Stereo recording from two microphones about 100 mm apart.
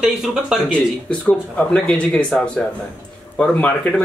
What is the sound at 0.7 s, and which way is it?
Speech, 10° left (ahead or behind).